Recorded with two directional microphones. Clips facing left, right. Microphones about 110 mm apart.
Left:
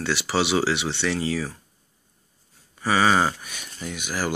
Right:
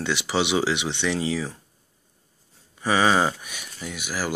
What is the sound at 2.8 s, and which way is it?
Speech, 15° right (ahead or behind).